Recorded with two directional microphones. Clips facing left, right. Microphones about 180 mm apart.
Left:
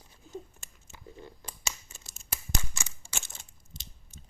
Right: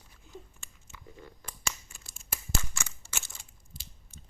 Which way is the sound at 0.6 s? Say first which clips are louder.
Even; 35° left (ahead or behind).